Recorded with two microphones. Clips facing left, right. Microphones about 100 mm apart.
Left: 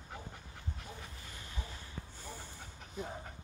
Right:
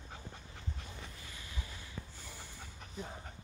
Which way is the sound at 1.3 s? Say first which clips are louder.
Left 1 dB; 40° left (ahead or behind).